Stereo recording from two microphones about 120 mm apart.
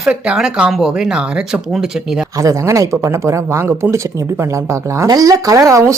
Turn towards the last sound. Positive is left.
turn(degrees=-25)  # may be behind; listen again after turning